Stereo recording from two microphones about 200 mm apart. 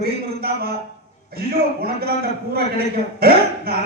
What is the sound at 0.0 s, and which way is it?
A man's voice, 50° right (ahead or behind).